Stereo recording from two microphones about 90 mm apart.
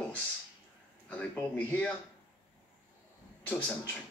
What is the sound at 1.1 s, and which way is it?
Speech, 15° left (ahead or behind).